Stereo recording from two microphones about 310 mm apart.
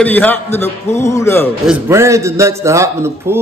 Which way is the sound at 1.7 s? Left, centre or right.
Centre.